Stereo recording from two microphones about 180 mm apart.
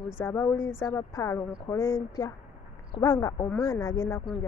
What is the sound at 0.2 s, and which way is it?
Speech, 15° left (ahead or behind).